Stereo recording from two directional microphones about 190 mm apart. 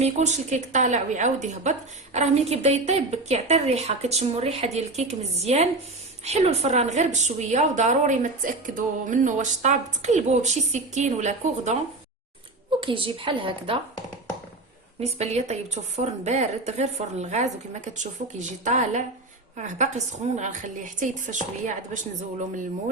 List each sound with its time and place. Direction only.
0.0 s a woman's voice: 35° right (ahead or behind)
12.8 s a woman's voice: 25° right (ahead or behind)
15.0 s a woman's voice: 35° right (ahead or behind)